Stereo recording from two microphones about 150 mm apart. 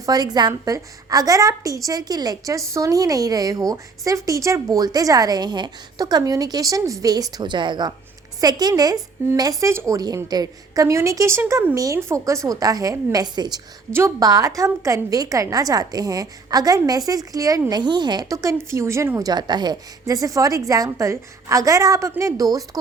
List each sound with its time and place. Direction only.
0.0 s a woman's voice: 25° right (ahead or behind)